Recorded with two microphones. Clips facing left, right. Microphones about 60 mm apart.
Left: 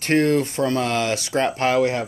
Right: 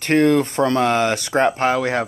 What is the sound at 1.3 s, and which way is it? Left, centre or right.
Speech, right.